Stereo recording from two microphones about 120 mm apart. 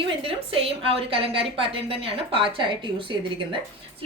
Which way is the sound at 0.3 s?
50° right (ahead or behind).